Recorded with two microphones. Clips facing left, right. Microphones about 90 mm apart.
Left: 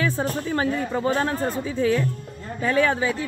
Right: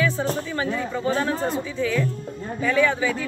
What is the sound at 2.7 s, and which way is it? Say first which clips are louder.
Speech: even; 40° left (ahead or behind).